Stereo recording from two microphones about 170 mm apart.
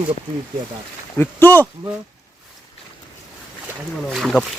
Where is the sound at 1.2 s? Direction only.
10° left (ahead or behind).